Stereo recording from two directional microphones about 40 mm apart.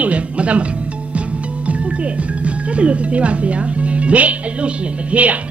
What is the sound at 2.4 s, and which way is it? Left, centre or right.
Speech, right.